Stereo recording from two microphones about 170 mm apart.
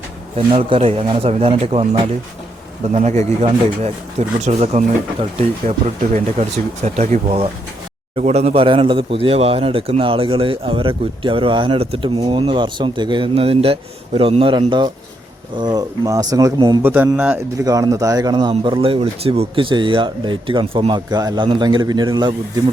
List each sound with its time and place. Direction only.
0.3 s a man's voice: 35° right (ahead or behind)
16.8 s a man's voice: 10° right (ahead or behind)
17.6 s a man's voice: 20° right (ahead or behind)